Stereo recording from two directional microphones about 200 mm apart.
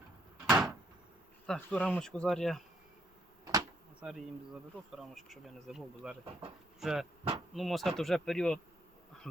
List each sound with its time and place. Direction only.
0.4 s door: centre (ahead or behind)
1.5 s speech: 5° left (ahead or behind)
3.4 s a sound: 15° right (ahead or behind)
4.9 s speech: centre (ahead or behind)
9.3 s insect: 5° left (ahead or behind)